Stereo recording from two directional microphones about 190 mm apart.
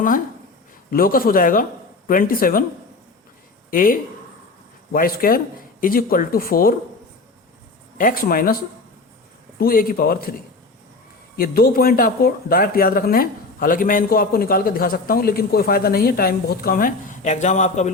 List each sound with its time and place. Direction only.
0.9 s speech: 50° left (ahead or behind)
3.7 s speech: 45° left (ahead or behind)
7.9 s speech: 45° left (ahead or behind)
11.3 s speech: 50° left (ahead or behind)